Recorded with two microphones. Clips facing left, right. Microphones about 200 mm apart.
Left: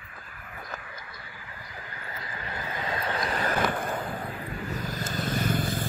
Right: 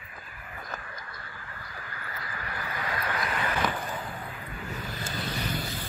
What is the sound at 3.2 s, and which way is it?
Vehicle, 40° left (ahead or behind).